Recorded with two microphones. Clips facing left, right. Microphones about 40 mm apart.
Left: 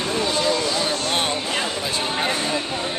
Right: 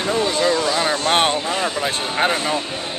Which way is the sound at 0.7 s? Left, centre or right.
Right.